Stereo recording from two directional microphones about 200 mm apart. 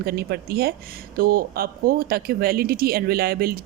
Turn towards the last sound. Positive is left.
turn(degrees=-50)  # may be behind; listen again after turning